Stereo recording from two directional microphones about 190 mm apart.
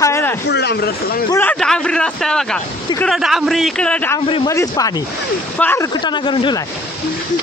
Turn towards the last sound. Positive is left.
turn(degrees=25)  # may be behind; listen again after turning